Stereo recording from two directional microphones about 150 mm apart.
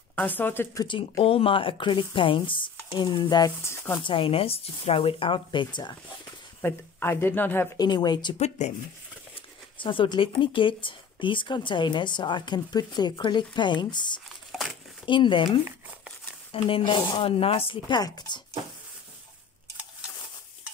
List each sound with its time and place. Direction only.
0.4 s speech: 15° left (ahead or behind)
0.8 s speech: 35° left (ahead or behind)
4.0 s speech: 35° left (ahead or behind)
6.6 s speech: 15° left (ahead or behind)
7.8 s speech: 25° left (ahead or behind)
8.4 s speech: 50° left (ahead or behind)
9.3 s speech: 35° left (ahead or behind)
16.5 s speech: 35° left (ahead or behind)